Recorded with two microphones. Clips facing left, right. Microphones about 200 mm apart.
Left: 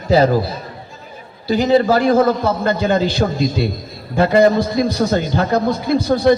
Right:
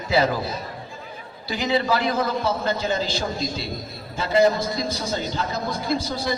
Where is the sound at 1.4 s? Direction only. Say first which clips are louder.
Left 9 dB; 40° left (ahead or behind).